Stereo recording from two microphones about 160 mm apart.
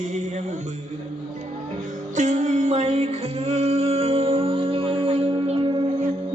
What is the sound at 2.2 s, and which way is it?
Music, 50° right (ahead or behind).